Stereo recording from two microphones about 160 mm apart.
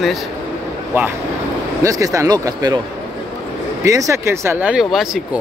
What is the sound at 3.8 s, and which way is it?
Speech, 20° right (ahead or behind).